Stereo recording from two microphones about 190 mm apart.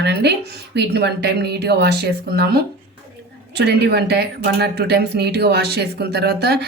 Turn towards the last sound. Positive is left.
turn(degrees=-60)  # may be behind; listen again after turning